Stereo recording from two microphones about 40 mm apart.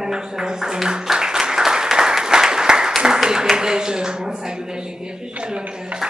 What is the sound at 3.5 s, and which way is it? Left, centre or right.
A man's voice, centre.